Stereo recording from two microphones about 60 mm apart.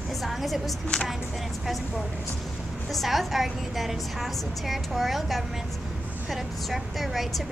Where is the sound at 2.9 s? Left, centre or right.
Centre.